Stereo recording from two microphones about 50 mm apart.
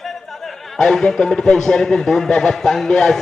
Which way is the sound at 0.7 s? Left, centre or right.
Centre.